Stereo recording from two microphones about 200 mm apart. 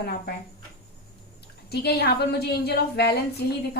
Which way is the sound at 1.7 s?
50° left (ahead or behind).